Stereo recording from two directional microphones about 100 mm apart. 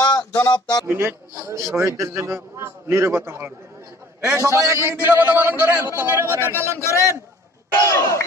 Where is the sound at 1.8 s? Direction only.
30° right (ahead or behind).